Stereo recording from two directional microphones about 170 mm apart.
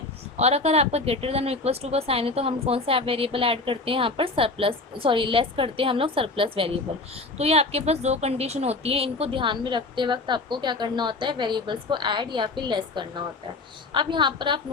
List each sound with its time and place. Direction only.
0.3 s a woman's voice: 40° right (ahead or behind)